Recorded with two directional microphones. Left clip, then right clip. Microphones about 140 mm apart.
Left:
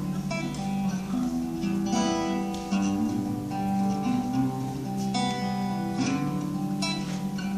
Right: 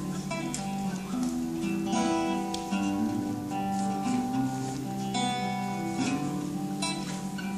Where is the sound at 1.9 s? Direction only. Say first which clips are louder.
Left 1 dB; 10° right (ahead or behind).